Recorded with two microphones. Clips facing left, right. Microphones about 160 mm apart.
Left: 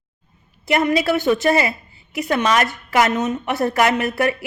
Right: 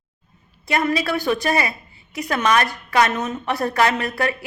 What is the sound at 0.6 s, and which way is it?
A woman's voice, 25° left (ahead or behind).